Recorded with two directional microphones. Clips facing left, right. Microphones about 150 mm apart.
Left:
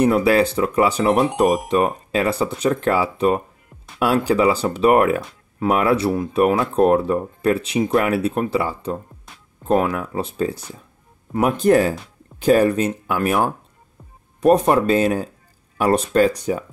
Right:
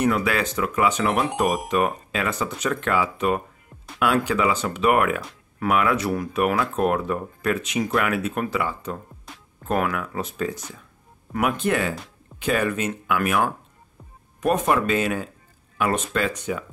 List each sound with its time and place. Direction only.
0.0 s speech: 35° left (ahead or behind)
1.2 s speech: centre (ahead or behind)
2.1 s speech: 35° left (ahead or behind)